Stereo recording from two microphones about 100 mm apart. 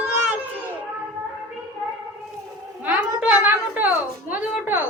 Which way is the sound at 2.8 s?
15° right (ahead or behind).